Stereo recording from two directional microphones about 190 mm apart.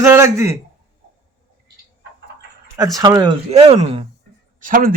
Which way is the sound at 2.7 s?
20° right (ahead or behind).